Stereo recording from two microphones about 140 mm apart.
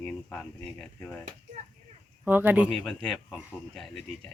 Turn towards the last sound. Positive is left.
turn(degrees=0)  # may be behind; listen again after turning